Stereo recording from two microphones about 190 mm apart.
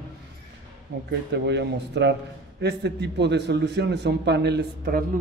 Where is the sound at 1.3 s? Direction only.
65° right (ahead or behind).